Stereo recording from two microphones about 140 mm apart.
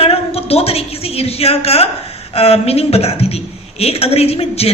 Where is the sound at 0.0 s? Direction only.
45° left (ahead or behind).